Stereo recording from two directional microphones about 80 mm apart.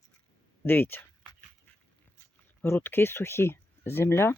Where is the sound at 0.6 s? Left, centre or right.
Left.